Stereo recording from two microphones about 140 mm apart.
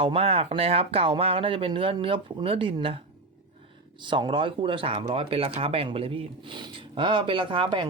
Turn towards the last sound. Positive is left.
turn(degrees=-35)  # may be behind; listen again after turning